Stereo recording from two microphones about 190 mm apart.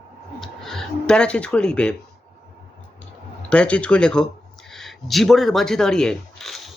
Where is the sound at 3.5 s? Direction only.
5° left (ahead or behind).